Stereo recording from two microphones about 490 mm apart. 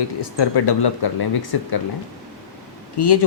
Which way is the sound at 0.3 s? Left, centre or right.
Left.